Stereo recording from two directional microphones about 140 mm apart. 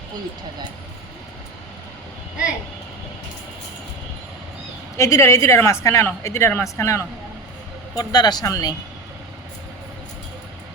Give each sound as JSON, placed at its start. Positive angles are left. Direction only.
{"t": 4.9, "sound": "speech", "side_deg": 20}